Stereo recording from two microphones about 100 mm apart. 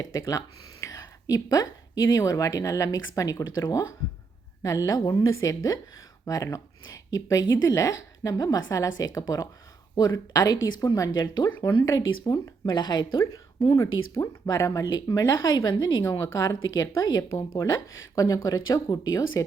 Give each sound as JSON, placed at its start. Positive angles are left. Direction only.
{"t": 0.0, "sound": "speech", "side_deg": 35}
{"t": 4.6, "sound": "a woman's voice", "side_deg": 35}
{"t": 11.2, "sound": "speech", "side_deg": 45}
{"t": 13.7, "sound": "a woman's voice", "side_deg": 30}